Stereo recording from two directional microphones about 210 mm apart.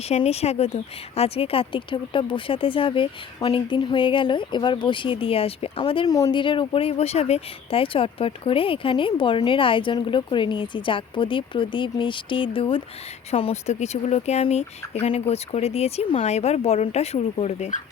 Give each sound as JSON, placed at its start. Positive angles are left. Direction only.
{"t": 0.0, "sound": "speech", "side_deg": 30}